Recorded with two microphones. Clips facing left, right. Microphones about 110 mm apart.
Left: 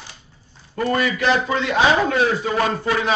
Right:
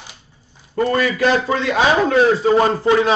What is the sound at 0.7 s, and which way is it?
A man's voice, 35° right (ahead or behind).